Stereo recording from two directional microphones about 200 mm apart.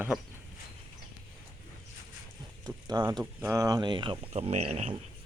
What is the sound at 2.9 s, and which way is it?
Speech, 20° right (ahead or behind).